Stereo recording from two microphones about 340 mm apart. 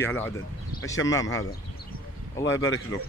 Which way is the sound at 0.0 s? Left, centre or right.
Centre.